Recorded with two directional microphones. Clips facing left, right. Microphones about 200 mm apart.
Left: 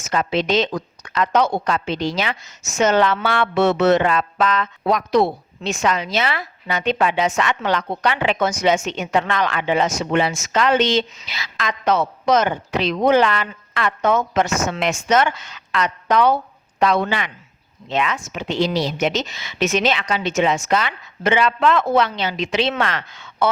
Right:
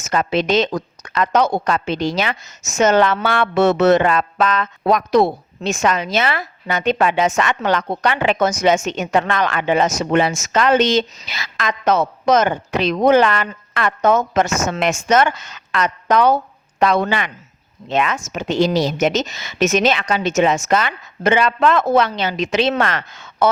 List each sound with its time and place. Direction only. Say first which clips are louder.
0.0 s a woman's voice: right 2 dB; 45° right (ahead or behind)